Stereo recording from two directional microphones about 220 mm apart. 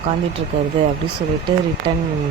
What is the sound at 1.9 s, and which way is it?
Speech, 20° right (ahead or behind).